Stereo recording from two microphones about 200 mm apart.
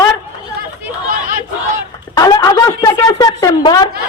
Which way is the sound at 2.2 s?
20° left (ahead or behind).